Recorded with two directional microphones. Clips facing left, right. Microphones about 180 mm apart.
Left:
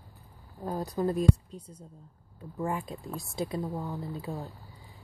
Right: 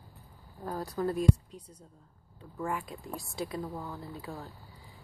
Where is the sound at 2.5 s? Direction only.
25° left (ahead or behind).